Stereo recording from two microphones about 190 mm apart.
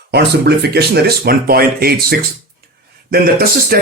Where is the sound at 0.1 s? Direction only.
60° right (ahead or behind).